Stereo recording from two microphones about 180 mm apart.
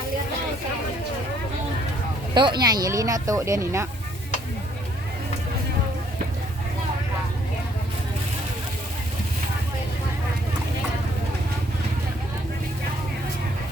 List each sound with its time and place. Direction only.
2.3 s speech: 25° right (ahead or behind)